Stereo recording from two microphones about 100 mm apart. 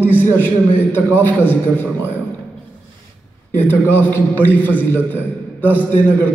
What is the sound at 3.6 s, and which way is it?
A man's voice, 20° left (ahead or behind).